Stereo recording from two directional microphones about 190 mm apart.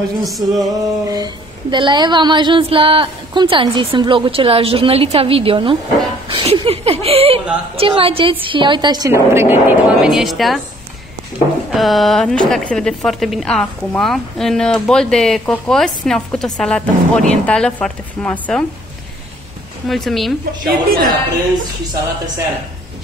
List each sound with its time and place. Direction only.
0.2 s a woman's voice: centre (ahead or behind)
0.7 s a woman's voice: 20° right (ahead or behind); by 10.6 s centre (ahead or behind)
11.7 s a woman's voice: centre (ahead or behind)
19.9 s a woman's voice: centre (ahead or behind)
20.6 s speech: 50° right (ahead or behind)